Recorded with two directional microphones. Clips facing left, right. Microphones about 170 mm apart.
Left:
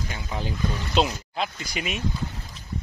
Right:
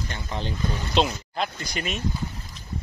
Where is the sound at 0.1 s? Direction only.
5° left (ahead or behind).